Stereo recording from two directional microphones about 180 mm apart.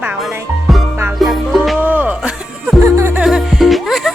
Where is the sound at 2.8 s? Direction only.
15° right (ahead or behind).